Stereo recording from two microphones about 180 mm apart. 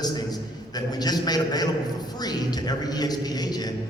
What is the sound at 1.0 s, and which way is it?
Speech, 20° left (ahead or behind).